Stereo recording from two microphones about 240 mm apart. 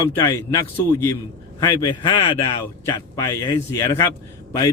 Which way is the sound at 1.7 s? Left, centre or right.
Centre.